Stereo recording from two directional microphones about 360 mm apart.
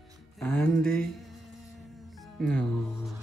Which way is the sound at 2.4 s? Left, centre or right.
Centre.